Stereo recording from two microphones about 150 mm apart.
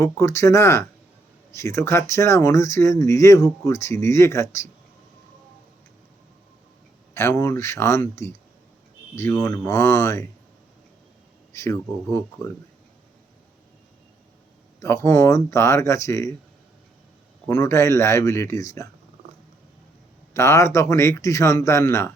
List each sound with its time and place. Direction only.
0.0 s speech: 20° left (ahead or behind)
7.1 s speech: 15° left (ahead or behind)
11.5 s speech: 20° left (ahead or behind)
14.8 s speech: 20° left (ahead or behind)
17.5 s speech: 20° left (ahead or behind)
20.3 s speech: 20° left (ahead or behind)